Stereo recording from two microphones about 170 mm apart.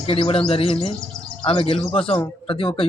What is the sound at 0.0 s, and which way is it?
Speech, 35° left (ahead or behind).